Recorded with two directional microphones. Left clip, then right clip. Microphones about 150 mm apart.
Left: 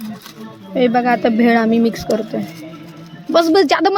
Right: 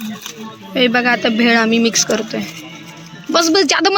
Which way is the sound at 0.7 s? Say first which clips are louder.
Right 1 dB; 10° left (ahead or behind).